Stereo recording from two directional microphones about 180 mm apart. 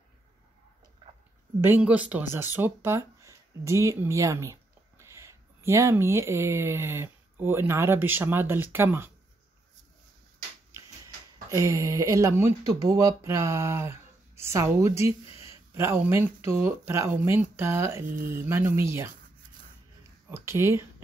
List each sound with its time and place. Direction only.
1.6 s speech: 10° right (ahead or behind)
11.5 s speech: 15° right (ahead or behind)
20.0 s a sound: 15° right (ahead or behind)